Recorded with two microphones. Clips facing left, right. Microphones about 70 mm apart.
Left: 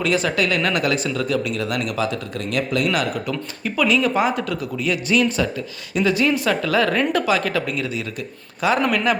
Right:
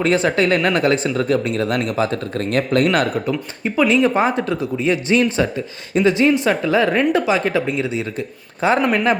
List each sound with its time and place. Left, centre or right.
0.0 s speech: right
3.6 s speech: right